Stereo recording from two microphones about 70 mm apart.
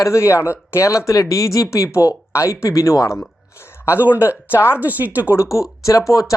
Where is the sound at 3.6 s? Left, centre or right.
Left.